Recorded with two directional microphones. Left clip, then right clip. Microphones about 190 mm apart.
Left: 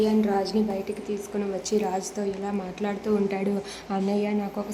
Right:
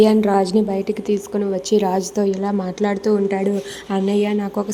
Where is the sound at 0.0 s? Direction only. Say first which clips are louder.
Right 9 dB; 45° right (ahead or behind).